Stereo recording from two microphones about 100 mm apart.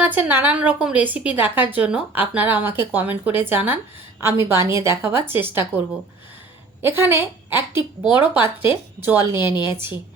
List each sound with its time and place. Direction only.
0.0 s a woman's voice: 15° right (ahead or behind)
6.8 s a woman's voice: 25° right (ahead or behind)
9.1 s a woman's voice: 45° left (ahead or behind)
9.7 s speech: 20° right (ahead or behind)